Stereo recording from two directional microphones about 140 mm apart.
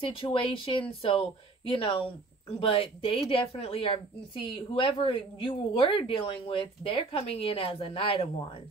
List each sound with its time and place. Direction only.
0.0 s speech: 35° left (ahead or behind)